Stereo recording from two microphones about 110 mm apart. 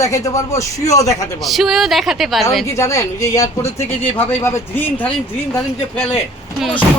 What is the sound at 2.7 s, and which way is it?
Speech, 25° left (ahead or behind).